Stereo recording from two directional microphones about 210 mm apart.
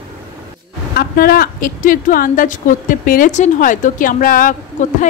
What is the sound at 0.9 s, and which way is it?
A woman's voice, 45° left (ahead or behind).